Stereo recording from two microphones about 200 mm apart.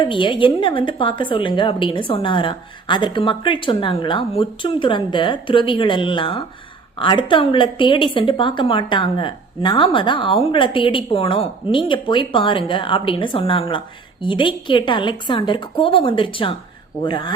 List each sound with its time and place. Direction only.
0.0 s a woman's voice: 25° left (ahead or behind)